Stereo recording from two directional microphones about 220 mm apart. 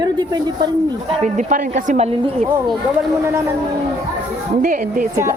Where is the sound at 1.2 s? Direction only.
35° right (ahead or behind).